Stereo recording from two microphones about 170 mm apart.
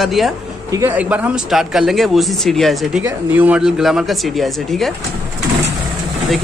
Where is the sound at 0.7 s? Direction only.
20° right (ahead or behind).